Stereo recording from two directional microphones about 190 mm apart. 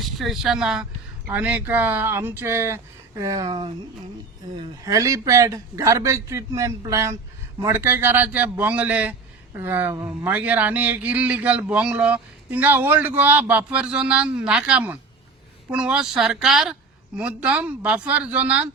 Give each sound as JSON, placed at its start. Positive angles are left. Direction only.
{"t": 0.0, "sound": "speech", "side_deg": 0}